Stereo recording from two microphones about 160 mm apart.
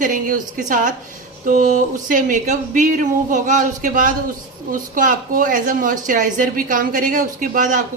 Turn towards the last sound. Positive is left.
turn(degrees=-55)  # may be behind; listen again after turning